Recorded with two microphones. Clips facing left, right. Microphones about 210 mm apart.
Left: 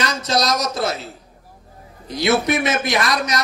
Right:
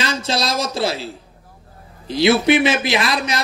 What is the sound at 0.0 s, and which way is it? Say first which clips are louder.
Speech: left 1 dB; 30° right (ahead or behind).